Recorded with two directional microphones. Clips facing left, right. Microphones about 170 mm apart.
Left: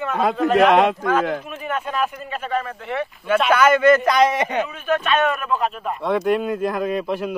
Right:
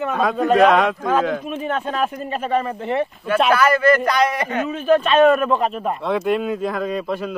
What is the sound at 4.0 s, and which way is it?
Speech, 25° left (ahead or behind).